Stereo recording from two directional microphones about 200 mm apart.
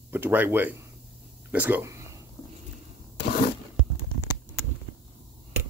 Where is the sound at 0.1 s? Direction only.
10° right (ahead or behind).